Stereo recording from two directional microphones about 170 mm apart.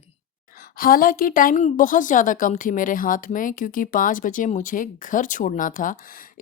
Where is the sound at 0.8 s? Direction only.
55° left (ahead or behind).